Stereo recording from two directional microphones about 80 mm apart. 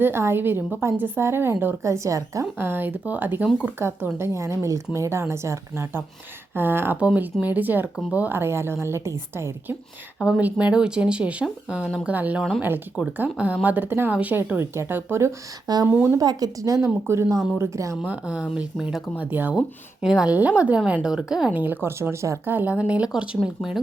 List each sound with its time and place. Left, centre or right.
0.0 s a woman's voice: right
1.8 s a woman's voice: right
2.6 s a woman's voice: right
6.9 s a woman's voice: centre; by 9.7 s right
10.2 s a woman's voice: centre
13.1 s a woman's voice: centre
15.6 s speech: right
16.8 s a woman's voice: right
18.0 s a woman's voice: centre
19.1 s a woman's voice: right
19.5 s a woman's voice: centre
21.5 s a woman's voice: right
22.5 s a woman's voice: centre